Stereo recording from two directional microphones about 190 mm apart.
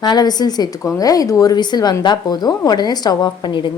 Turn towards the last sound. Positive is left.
turn(degrees=25)  # may be behind; listen again after turning